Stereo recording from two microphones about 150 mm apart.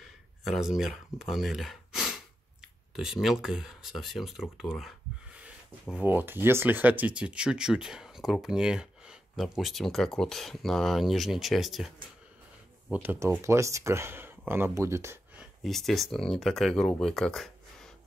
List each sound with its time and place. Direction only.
0.4 s speech: centre (ahead or behind)
12.9 s speech: 15° right (ahead or behind)
15.6 s speech: centre (ahead or behind)